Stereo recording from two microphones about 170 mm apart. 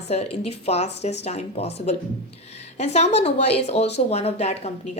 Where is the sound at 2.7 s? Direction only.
40° left (ahead or behind).